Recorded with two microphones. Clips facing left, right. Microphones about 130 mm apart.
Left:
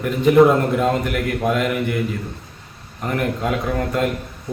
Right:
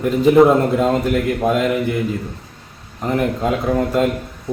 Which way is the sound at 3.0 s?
20° right (ahead or behind).